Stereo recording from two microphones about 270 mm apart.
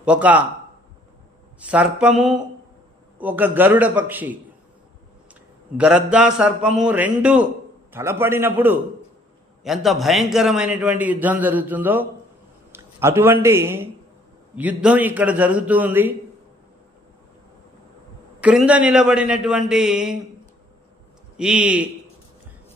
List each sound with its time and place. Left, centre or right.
0.0 s a man's voice: centre
1.6 s a man's voice: centre
3.2 s a man's voice: centre
5.3 s a sound: centre
6.0 s a man's voice: centre
18.4 s a man's voice: centre
21.4 s a man's voice: centre